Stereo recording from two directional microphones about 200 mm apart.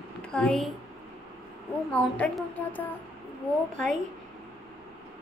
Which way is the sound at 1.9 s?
5° left (ahead or behind).